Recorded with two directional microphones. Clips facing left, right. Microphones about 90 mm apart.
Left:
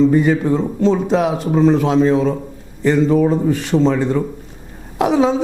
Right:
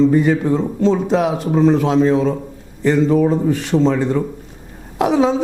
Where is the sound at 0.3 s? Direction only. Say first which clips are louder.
Even; 20° left (ahead or behind).